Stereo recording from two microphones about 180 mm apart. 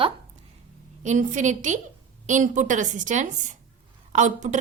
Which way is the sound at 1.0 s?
45° right (ahead or behind).